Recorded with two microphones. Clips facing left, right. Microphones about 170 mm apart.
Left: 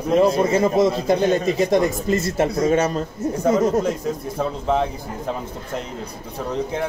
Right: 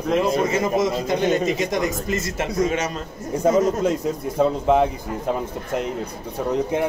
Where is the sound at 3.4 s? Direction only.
15° right (ahead or behind).